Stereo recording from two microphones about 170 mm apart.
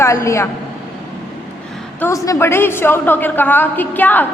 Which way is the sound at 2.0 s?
15° left (ahead or behind).